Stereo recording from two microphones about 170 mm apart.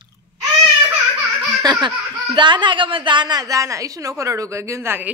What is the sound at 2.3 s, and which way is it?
A woman's voice, 25° right (ahead or behind).